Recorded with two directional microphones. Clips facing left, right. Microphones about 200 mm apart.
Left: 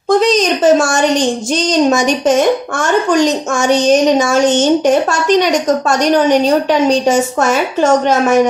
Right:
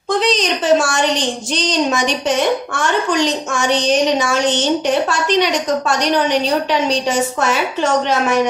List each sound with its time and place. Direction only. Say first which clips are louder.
0.1 s a woman's voice: left 6 dB; 45° left (ahead or behind)